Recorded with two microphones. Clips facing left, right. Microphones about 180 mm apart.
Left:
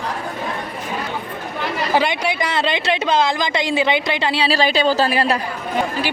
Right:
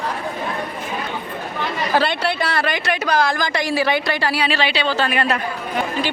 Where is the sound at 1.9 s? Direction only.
15° left (ahead or behind); by 5.3 s 30° left (ahead or behind).